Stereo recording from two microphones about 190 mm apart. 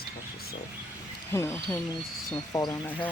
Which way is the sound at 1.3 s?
15° left (ahead or behind).